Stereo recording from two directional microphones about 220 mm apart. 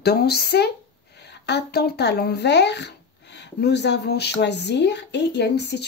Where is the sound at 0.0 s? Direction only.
45° left (ahead or behind).